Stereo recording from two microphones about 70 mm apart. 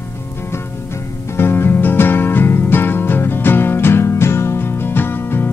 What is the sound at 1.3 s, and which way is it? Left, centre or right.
Music, left.